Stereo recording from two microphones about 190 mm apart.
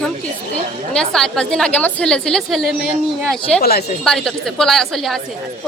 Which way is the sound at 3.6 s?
55° left (ahead or behind).